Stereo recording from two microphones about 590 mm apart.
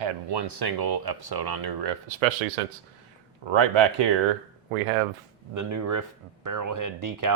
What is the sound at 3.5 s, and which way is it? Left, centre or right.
Speech, right.